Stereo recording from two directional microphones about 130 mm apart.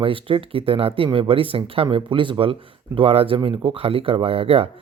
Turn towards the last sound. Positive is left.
turn(degrees=-50)  # may be behind; listen again after turning